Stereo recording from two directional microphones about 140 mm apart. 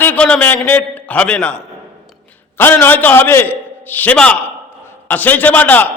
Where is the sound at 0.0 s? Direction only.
10° left (ahead or behind).